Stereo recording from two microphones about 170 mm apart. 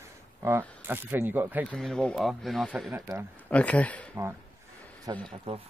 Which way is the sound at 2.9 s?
20° right (ahead or behind).